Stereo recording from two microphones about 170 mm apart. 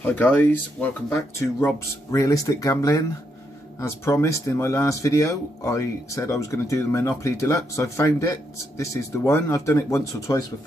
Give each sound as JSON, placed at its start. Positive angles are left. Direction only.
{"t": 0.0, "sound": "speech", "side_deg": 10}